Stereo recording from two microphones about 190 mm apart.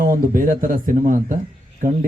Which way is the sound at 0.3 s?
45° right (ahead or behind).